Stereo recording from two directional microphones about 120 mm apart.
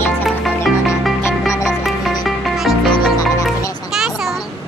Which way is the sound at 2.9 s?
30° left (ahead or behind).